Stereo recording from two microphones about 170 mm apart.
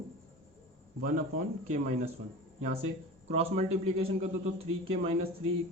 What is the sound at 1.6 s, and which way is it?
Speech, 40° right (ahead or behind).